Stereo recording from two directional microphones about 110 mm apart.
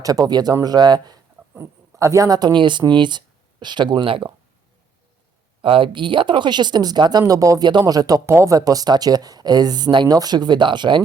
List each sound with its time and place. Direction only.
0.0 s speech: 35° right (ahead or behind)
1.5 s speech: 25° right (ahead or behind); by 4.3 s 50° right (ahead or behind)
5.6 s speech: 55° right (ahead or behind)